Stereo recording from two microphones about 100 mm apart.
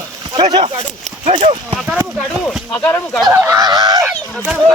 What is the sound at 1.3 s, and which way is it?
Speech, 75° right (ahead or behind).